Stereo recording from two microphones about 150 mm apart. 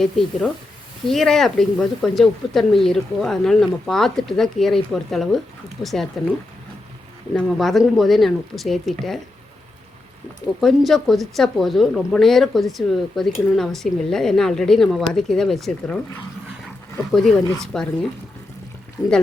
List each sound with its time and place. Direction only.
0.0 s speech: centre (ahead or behind)
7.3 s speech: centre (ahead or behind)
10.6 s speech: centre (ahead or behind)
17.1 s speech: centre (ahead or behind)
19.0 s speech: 25° left (ahead or behind)